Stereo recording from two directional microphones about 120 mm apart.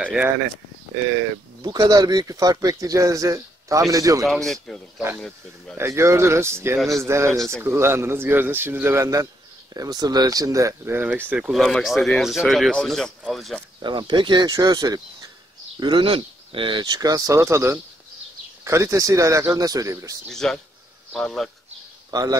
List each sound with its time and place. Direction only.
0.0 s speech: 10° right (ahead or behind)
1.6 s speech: 35° right (ahead or behind)
4.5 s speech: 5° left (ahead or behind)
5.8 s speech: 20° right (ahead or behind); by 13.6 s centre (ahead or behind)
13.7 s speech: 40° right (ahead or behind)
15.8 s speech: 45° right (ahead or behind)
16.8 s speech: 30° right (ahead or behind)
20.2 s speech: 5° left (ahead or behind)
22.1 s speech: 30° right (ahead or behind)